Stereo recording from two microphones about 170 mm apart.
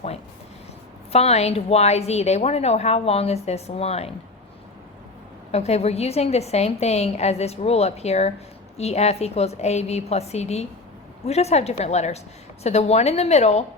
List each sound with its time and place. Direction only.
1.1 s a woman's voice: 40° left (ahead or behind)
5.5 s a woman's voice: 40° left (ahead or behind)